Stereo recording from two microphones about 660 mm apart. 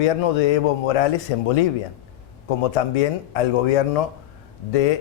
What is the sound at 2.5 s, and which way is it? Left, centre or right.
A man's voice, left.